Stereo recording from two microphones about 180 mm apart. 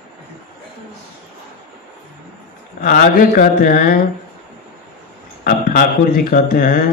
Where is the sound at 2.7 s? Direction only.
50° left (ahead or behind).